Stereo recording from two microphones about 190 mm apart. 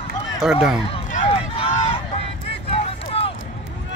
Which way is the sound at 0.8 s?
30° left (ahead or behind).